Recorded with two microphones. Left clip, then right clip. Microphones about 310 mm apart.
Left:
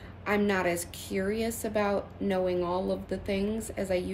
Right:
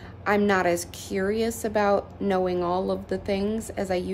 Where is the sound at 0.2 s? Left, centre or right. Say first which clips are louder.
Right 6 dB; centre.